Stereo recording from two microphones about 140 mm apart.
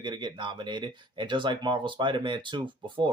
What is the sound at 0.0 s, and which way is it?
Speech, 30° right (ahead or behind).